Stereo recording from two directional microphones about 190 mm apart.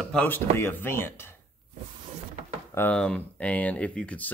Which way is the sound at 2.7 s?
10° left (ahead or behind).